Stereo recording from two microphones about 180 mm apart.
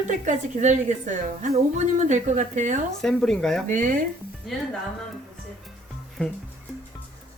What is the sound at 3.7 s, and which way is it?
Speech, 45° right (ahead or behind).